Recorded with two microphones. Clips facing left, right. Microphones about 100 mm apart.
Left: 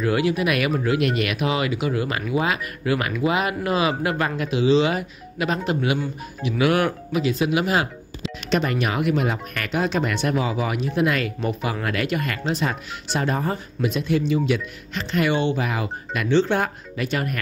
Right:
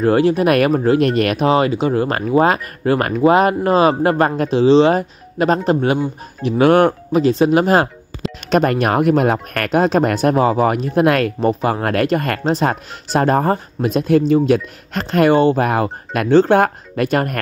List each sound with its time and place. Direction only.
0.0 s speech: 35° right (ahead or behind); by 11.3 s 55° right (ahead or behind)
11.3 s speech: 40° right (ahead or behind)